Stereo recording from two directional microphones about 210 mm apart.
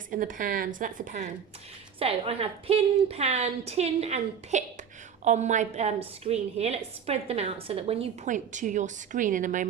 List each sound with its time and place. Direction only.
0.1 s a woman's voice: 40° right (ahead or behind)
2.0 s a woman's voice: 25° right (ahead or behind)